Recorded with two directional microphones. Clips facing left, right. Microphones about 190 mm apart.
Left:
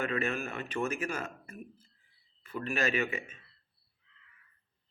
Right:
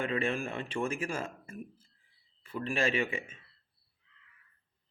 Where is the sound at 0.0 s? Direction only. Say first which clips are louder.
Right 1 dB; 30° right (ahead or behind).